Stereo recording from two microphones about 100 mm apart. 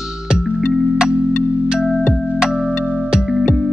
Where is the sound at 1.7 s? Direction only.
5° right (ahead or behind).